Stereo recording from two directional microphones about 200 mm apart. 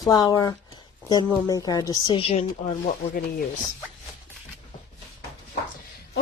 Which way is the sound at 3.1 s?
45° left (ahead or behind).